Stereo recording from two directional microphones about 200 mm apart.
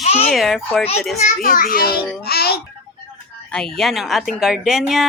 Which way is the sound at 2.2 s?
50° left (ahead or behind).